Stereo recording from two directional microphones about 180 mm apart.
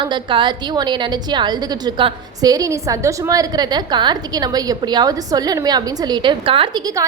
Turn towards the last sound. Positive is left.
turn(degrees=-30)  # may be behind; listen again after turning